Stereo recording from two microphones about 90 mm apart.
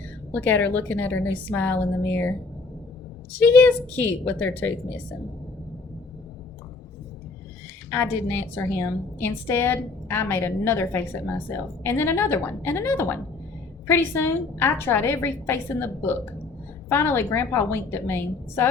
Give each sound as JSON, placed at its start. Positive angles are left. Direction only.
{"t": 0.3, "sound": "a woman's voice", "side_deg": 20}
{"t": 3.3, "sound": "a woman's voice", "side_deg": 20}
{"t": 7.9, "sound": "a woman's voice", "side_deg": 30}